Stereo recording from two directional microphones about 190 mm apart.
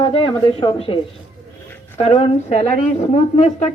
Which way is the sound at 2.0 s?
30° left (ahead or behind).